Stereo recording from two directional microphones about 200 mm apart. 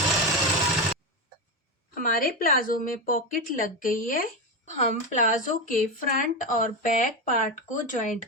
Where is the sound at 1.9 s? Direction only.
45° left (ahead or behind).